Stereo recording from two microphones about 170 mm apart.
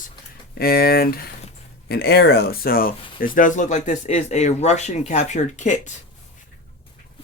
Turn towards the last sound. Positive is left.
turn(degrees=45)  # may be behind; listen again after turning